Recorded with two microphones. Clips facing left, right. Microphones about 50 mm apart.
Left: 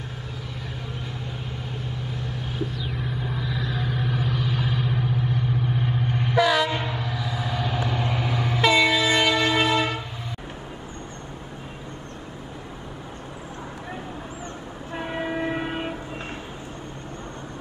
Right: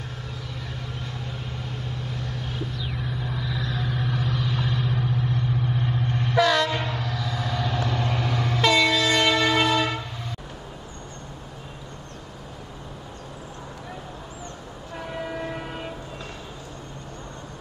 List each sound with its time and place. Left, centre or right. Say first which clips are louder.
0.9 s vehicle: left 1 dB; centre
15.0 s train: left 4 dB; left